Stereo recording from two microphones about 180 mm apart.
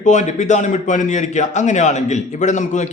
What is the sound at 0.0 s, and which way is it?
A man's voice, 45° left (ahead or behind).